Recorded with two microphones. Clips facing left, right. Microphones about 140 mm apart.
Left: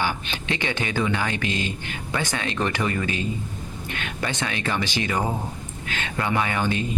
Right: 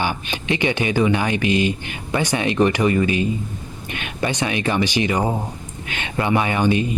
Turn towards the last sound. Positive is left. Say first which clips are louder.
# right 6 dB
turn(degrees=-15)  # may be behind; listen again after turning